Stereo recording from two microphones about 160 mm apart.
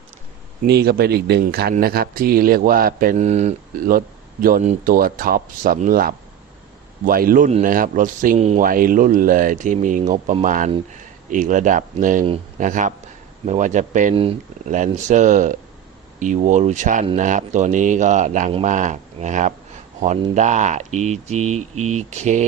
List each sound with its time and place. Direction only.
0.6 s speech: 80° right
3.2 s speech: 45° right (ahead or behind)
3.8 s speech: 60° right (ahead or behind)